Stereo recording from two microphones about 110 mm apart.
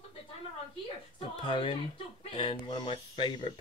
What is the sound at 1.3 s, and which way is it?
Speech, 50° left (ahead or behind).